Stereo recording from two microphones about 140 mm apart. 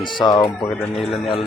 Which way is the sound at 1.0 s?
Centre (ahead or behind).